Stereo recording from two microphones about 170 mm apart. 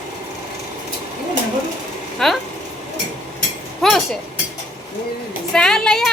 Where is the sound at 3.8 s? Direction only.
Centre (ahead or behind).